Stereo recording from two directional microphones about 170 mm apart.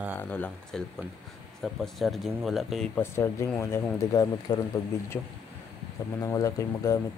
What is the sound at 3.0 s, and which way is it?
Speech, 15° left (ahead or behind).